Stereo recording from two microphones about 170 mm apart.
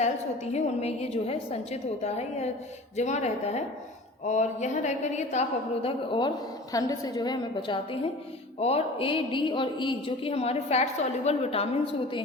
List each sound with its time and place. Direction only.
0.5 s a woman's voice: 40° left (ahead or behind)